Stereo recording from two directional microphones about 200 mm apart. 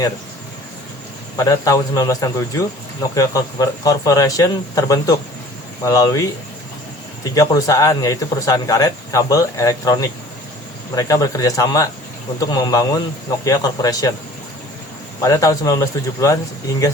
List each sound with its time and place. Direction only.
1.4 s a man's voice: 15° left (ahead or behind)
7.3 s a man's voice: 15° left (ahead or behind)
15.2 s a man's voice: 15° left (ahead or behind)